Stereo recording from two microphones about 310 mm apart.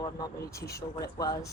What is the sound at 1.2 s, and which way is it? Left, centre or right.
Speech, centre.